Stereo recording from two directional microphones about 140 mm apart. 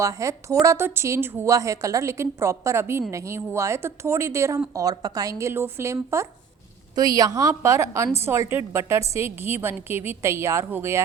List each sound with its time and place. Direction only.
0.0 s a woman's voice: 20° right (ahead or behind)